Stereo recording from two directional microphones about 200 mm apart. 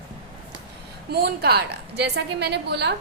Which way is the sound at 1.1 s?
55° right (ahead or behind).